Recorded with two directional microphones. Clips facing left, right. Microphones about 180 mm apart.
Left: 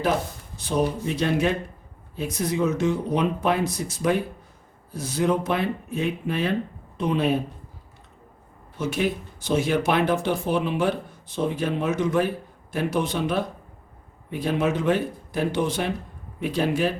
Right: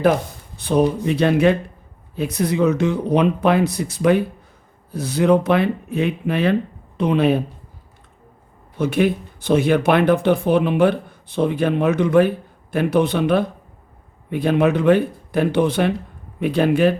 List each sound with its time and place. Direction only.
0.5 s speech: 60° right (ahead or behind)
8.8 s speech: 60° right (ahead or behind)